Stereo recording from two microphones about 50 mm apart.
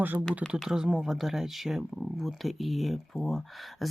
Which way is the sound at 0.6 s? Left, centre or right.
Centre.